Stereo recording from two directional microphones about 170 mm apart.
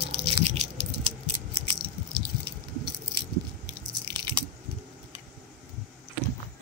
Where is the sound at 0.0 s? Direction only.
35° right (ahead or behind).